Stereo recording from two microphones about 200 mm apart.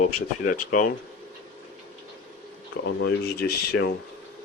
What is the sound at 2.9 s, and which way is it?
Speech, 60° left (ahead or behind).